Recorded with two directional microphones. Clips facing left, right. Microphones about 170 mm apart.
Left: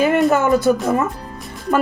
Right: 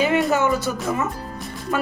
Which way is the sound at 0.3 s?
55° left (ahead or behind).